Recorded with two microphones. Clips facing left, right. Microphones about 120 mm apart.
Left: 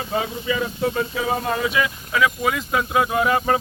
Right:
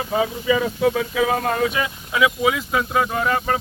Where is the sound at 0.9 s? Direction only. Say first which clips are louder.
Right 3 dB; 90° right.